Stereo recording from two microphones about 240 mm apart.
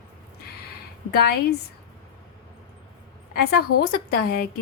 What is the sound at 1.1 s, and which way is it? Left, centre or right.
Speech, left.